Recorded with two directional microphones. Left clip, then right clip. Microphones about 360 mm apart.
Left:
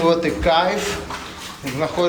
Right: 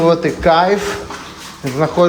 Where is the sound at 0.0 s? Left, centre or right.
Centre.